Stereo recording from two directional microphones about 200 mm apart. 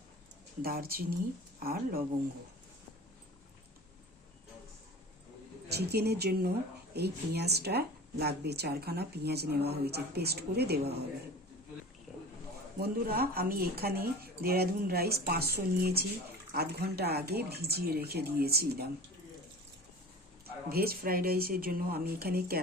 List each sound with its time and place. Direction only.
0.6 s speech: 50° right (ahead or behind)
5.6 s speech: 55° right (ahead or behind)
12.1 s a sound: centre (ahead or behind)
12.8 s speech: 50° right (ahead or behind)
20.7 s speech: 50° right (ahead or behind)